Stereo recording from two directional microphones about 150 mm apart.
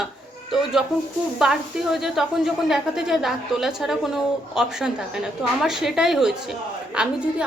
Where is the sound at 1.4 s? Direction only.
Centre (ahead or behind).